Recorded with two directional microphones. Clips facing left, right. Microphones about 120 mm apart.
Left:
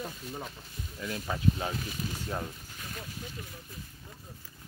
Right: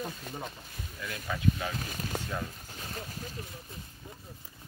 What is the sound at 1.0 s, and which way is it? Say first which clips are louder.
Speech: left 1 dB; 30° left (ahead or behind).